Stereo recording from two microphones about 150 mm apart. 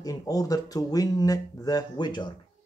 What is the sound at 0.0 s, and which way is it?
Speech, 25° left (ahead or behind).